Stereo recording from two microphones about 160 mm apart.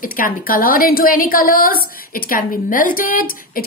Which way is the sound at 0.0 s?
60° left (ahead or behind).